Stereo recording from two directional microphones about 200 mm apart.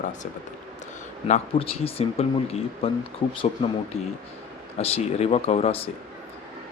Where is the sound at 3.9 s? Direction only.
30° left (ahead or behind).